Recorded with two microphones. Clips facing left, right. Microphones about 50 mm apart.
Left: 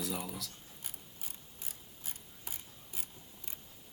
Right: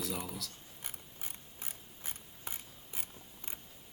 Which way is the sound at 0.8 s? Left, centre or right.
Right.